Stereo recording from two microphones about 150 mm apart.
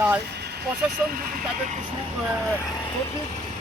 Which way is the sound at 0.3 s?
90° right.